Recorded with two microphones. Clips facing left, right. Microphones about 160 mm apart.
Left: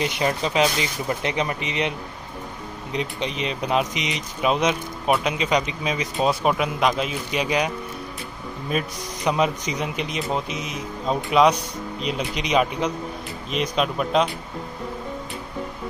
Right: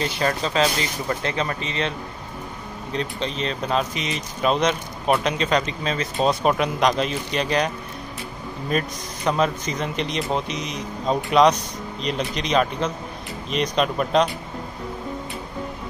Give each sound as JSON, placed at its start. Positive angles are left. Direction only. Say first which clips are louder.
{"t": 0.0, "sound": "speech", "louder": "even", "side_deg": 15}
{"t": 6.1, "sound": "speech", "louder": "right 1 dB", "side_deg": 5}